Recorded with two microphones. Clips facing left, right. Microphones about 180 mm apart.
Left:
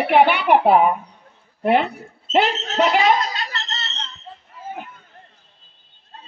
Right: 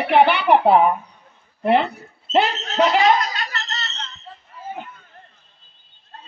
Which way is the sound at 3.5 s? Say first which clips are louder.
Even; 25° left (ahead or behind).